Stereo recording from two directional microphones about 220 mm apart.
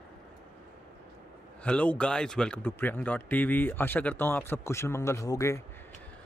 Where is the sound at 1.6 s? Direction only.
5° left (ahead or behind).